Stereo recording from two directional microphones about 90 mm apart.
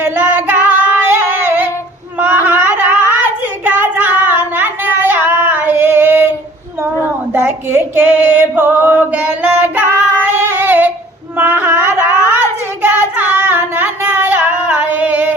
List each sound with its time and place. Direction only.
0.0 s child singing: 20° right (ahead or behind)
2.1 s a sound: 20° right (ahead or behind)
3.6 s child singing: 20° right (ahead or behind)
7.3 s female singing: 25° right (ahead or behind)
10.6 s a sound: 20° right (ahead or behind)
11.3 s child singing: 20° right (ahead or behind)